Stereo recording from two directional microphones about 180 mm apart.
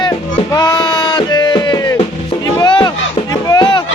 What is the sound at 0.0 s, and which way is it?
Music, 20° left (ahead or behind).